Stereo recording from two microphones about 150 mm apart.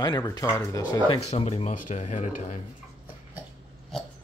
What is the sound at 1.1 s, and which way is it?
Speech, 40° left (ahead or behind).